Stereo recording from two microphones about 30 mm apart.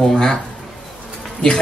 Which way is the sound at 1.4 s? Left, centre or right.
Left.